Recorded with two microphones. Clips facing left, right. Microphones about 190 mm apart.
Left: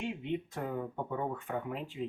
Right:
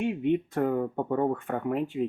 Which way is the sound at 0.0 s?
55° right (ahead or behind).